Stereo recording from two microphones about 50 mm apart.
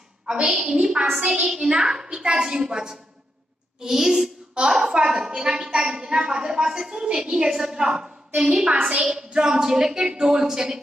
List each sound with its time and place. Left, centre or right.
0.5 s a woman's voice: centre